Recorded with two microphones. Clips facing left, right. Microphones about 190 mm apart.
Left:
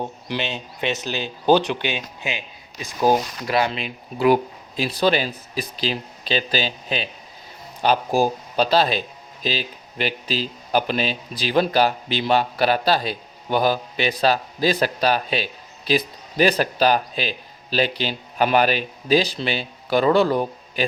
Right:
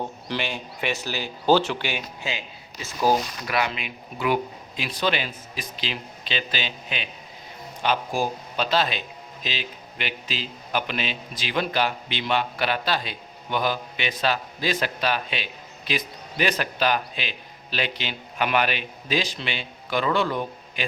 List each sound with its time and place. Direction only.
0.0 s a man's voice: 15° left (ahead or behind); by 20.8 s 40° left (ahead or behind)